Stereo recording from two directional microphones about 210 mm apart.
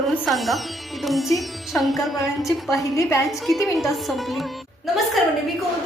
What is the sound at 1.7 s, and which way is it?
Speech, centre (ahead or behind).